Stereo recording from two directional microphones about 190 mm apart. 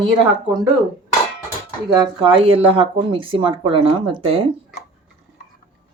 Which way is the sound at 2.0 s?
25° right (ahead or behind).